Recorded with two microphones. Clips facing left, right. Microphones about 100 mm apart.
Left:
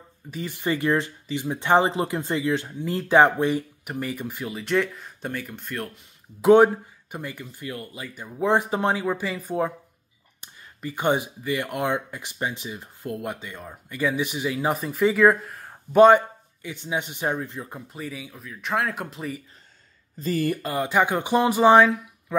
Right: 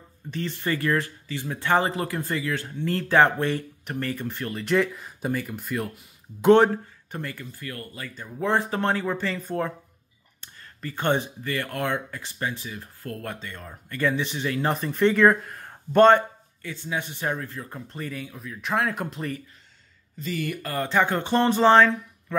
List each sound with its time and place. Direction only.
0.3 s speech: 10° left (ahead or behind)
6.5 s speech: 10° left (ahead or behind)
16.6 s speech: 15° left (ahead or behind)
20.2 s speech: 40° left (ahead or behind)
20.6 s speech: 15° left (ahead or behind)